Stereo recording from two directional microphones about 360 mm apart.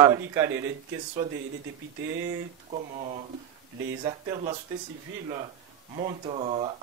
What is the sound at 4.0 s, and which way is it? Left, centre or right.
Speech, centre.